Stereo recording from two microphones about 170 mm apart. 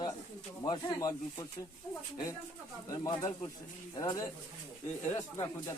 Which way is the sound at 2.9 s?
20° left (ahead or behind).